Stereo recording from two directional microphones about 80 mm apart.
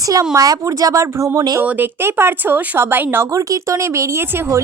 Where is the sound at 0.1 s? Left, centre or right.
Right.